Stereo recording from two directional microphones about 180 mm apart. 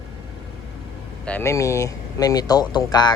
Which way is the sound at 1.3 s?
10° left (ahead or behind).